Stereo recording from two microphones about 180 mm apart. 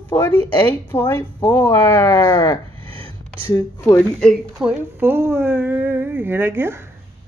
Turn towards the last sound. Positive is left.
turn(degrees=-15)  # may be behind; listen again after turning